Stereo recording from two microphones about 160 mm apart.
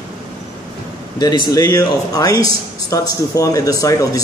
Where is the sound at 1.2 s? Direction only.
25° left (ahead or behind).